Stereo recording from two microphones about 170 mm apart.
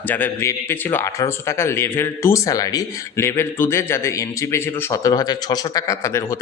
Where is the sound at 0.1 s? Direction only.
15° left (ahead or behind).